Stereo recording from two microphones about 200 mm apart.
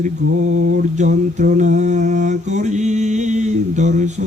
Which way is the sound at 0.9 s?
35° right (ahead or behind).